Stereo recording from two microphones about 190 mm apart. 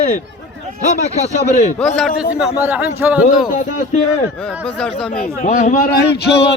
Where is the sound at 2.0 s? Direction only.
Centre (ahead or behind).